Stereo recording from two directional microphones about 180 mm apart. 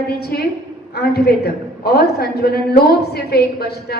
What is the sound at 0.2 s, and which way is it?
A woman's voice, 60° left (ahead or behind).